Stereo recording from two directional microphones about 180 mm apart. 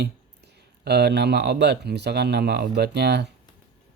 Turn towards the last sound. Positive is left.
turn(degrees=-70)  # may be behind; listen again after turning